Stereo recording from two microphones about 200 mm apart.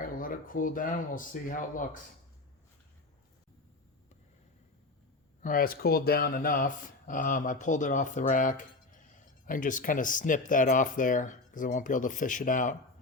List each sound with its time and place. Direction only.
0.0 s speech: 45° left (ahead or behind)
5.4 s speech: 45° left (ahead or behind)